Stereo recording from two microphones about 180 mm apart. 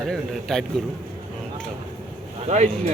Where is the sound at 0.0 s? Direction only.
5° left (ahead or behind).